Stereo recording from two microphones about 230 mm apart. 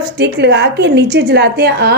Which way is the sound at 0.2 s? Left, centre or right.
Right.